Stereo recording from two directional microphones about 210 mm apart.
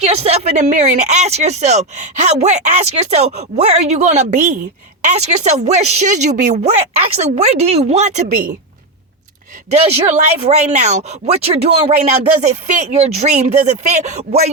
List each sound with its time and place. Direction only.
0.0 s speech: 30° right (ahead or behind)
9.6 s speech: 30° right (ahead or behind)